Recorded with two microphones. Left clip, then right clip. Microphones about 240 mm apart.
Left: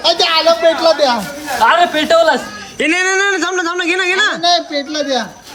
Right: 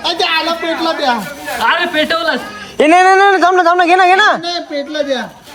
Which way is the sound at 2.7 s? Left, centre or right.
Centre.